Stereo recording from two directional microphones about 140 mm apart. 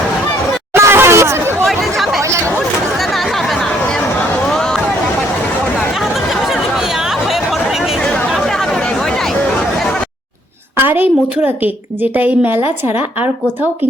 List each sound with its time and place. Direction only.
0.7 s chatter: 15° right (ahead or behind)
1.6 s chatter: centre (ahead or behind)
3.0 s a sound: centre (ahead or behind)
4.4 s hubbub: 5° left (ahead or behind)
5.9 s chatter: centre (ahead or behind)
10.8 s a woman's voice: 15° right (ahead or behind)